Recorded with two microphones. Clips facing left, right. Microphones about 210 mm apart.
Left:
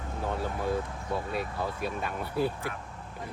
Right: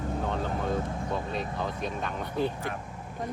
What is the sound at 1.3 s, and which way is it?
Speech, 5° left (ahead or behind).